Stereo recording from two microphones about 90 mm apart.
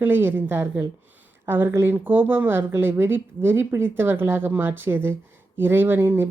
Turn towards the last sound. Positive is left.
turn(degrees=-20)  # may be behind; listen again after turning